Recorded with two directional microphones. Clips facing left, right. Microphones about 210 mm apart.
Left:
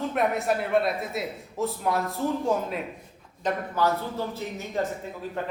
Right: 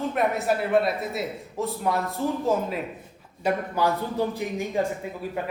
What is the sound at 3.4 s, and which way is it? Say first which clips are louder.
A man's voice: right 2 dB; 10° right (ahead or behind).